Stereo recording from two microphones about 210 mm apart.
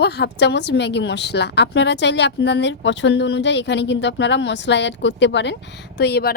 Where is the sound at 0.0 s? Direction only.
50° left (ahead or behind).